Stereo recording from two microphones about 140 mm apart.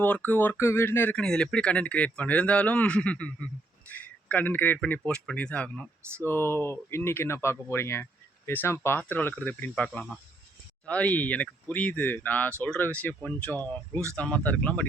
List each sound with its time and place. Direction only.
0.0 s speech: 10° left (ahead or behind)